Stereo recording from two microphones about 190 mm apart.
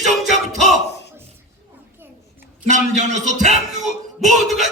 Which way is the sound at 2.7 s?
40° right (ahead or behind).